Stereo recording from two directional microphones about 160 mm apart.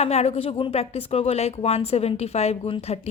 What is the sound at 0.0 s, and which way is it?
Speech, 40° left (ahead or behind).